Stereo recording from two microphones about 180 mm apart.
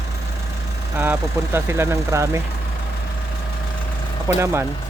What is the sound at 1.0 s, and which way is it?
Speech, 15° right (ahead or behind).